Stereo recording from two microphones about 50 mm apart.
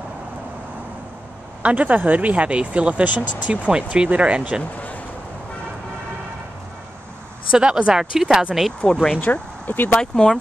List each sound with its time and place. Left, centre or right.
1.6 s speech: right
3.7 s speech: centre
7.5 s speech: centre
9.2 s speech: left
9.9 s speech: centre